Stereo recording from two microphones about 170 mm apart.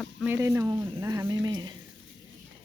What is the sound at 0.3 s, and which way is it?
Speech, 15° right (ahead or behind).